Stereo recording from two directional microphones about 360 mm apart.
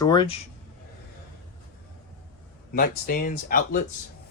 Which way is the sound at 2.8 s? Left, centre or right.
Left.